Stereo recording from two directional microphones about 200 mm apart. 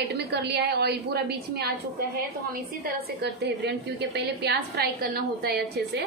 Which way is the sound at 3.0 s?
55° right (ahead or behind).